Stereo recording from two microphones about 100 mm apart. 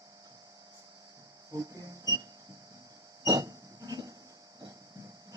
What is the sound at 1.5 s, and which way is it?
Music, 35° right (ahead or behind).